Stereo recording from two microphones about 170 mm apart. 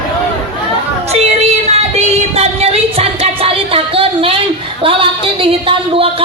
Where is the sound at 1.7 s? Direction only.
40° right (ahead or behind).